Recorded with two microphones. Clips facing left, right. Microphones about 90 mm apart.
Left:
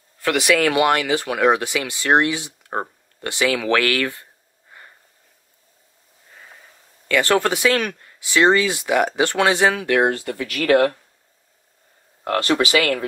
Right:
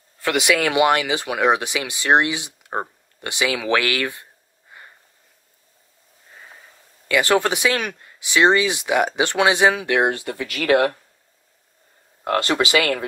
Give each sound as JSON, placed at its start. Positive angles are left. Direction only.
{"t": 0.2, "sound": "speech", "side_deg": -20}
{"t": 7.1, "sound": "speech", "side_deg": -15}
{"t": 12.3, "sound": "speech", "side_deg": -25}